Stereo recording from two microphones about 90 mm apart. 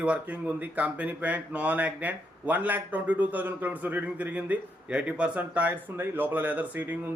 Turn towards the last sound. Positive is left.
turn(degrees=-20)  # may be behind; listen again after turning